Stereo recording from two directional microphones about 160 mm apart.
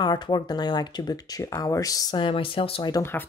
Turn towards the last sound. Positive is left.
turn(degrees=15)  # may be behind; listen again after turning